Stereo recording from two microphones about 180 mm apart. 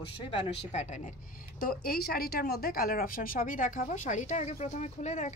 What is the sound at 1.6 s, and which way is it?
Speech, 60° left (ahead or behind).